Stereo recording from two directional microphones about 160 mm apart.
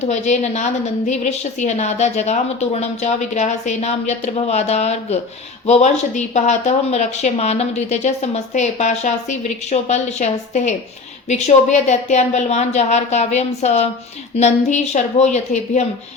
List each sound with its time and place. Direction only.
0.1 s a woman's voice: 45° left (ahead or behind)